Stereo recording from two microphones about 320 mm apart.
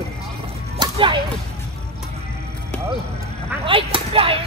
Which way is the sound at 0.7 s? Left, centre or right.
Centre.